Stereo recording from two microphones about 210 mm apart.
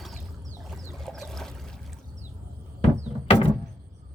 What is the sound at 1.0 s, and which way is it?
Trickle, centre (ahead or behind).